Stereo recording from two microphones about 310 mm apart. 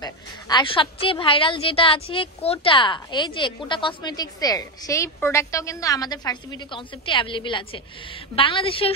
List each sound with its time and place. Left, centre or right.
0.0 s a woman's voice: centre